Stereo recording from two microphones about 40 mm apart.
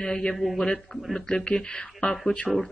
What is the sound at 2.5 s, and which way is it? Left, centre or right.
Speech, centre.